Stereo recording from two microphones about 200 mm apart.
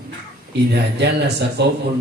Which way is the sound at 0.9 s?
55° right (ahead or behind).